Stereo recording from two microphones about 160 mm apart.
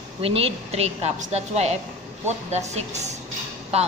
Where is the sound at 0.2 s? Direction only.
35° right (ahead or behind).